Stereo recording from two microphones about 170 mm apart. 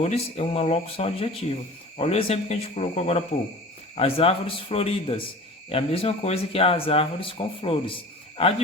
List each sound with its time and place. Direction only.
0.0 s speech: 40° left (ahead or behind)